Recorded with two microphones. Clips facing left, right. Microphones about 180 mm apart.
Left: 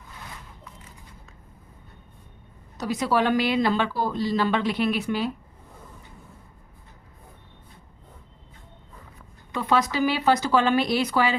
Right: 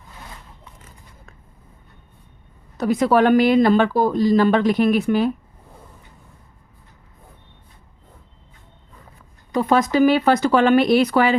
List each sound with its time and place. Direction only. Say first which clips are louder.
2.7 s speech: right 7 dB; 55° right (ahead or behind)
9.5 s speech: right 6 dB; 45° right (ahead or behind)